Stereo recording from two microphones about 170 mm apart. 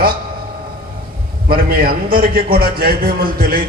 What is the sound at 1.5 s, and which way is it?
A man's voice, 60° right (ahead or behind).